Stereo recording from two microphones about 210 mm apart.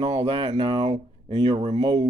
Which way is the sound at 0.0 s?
30° right (ahead or behind).